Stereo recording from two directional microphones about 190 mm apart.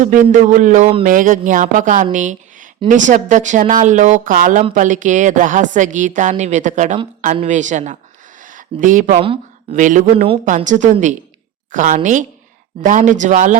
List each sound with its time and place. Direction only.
0.0 s a woman's voice: 45° right (ahead or behind)